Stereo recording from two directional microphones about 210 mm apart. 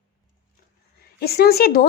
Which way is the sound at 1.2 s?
45° left (ahead or behind).